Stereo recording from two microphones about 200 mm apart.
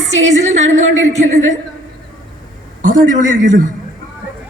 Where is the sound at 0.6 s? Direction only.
75° right (ahead or behind).